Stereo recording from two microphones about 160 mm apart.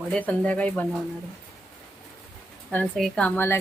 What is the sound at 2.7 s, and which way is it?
Speech, 5° left (ahead or behind).